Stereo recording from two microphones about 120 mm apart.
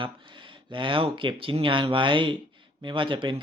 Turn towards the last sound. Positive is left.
turn(degrees=-45)  # may be behind; listen again after turning